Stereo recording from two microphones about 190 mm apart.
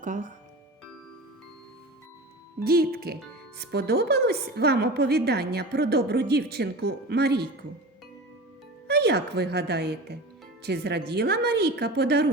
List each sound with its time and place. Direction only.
2.6 s a woman's voice: 55° right (ahead or behind)
8.9 s a woman's voice: 60° right (ahead or behind)